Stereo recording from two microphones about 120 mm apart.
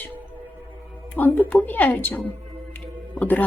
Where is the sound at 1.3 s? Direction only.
15° left (ahead or behind).